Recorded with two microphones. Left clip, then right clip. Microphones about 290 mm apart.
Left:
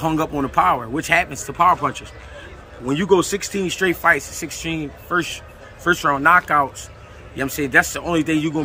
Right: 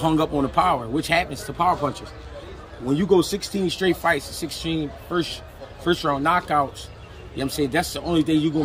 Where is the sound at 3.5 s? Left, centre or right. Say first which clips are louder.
Left 2 dB; centre.